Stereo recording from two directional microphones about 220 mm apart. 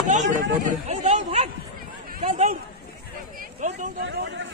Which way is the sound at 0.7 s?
30° right (ahead or behind).